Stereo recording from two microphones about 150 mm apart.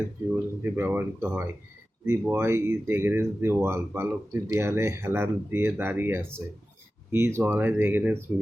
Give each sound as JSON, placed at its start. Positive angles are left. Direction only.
{"t": 0.6, "sound": "speech", "side_deg": -15}